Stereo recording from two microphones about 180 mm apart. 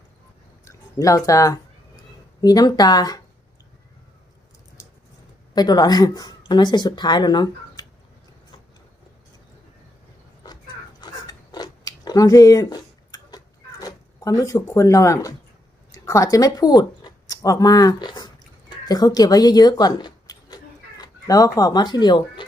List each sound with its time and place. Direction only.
0.6 s speech: 15° left (ahead or behind)
4.8 s a sound: 15° left (ahead or behind)
5.5 s speech: 20° left (ahead or behind)
11.0 s chewing: 20° left (ahead or behind)
16.0 s speech: 20° left (ahead or behind)